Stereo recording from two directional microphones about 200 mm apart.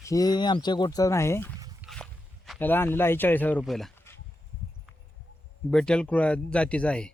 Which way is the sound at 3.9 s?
10° left (ahead or behind).